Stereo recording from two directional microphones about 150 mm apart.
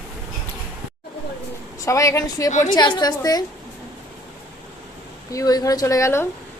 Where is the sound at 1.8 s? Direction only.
20° left (ahead or behind).